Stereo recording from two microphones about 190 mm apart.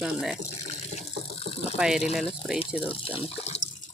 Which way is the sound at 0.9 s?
30° left (ahead or behind).